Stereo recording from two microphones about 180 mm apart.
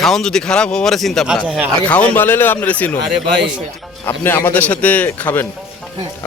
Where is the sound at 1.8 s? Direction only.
5° left (ahead or behind).